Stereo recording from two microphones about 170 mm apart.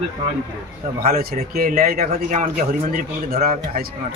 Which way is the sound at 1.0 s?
60° right (ahead or behind).